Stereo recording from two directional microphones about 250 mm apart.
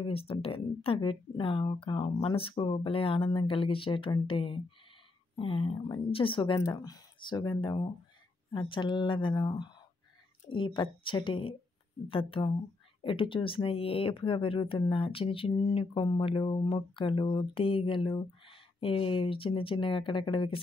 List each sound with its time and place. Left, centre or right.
0.0 s speech: left